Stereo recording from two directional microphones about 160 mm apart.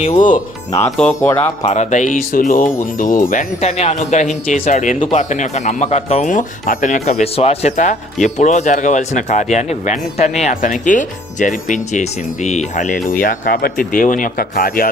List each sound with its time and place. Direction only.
0.2 s speech: 55° left (ahead or behind)
0.9 s speech: 5° left (ahead or behind)
1.6 s speech: 45° left (ahead or behind)
13.1 s speech: 60° left (ahead or behind)